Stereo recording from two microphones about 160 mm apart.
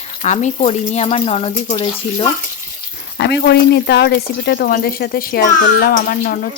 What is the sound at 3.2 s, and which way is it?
Speech, 90° left.